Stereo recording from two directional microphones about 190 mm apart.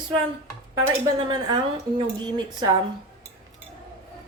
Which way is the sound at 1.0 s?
20° right (ahead or behind).